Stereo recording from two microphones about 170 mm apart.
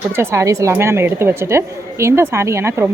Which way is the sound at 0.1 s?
15° right (ahead or behind).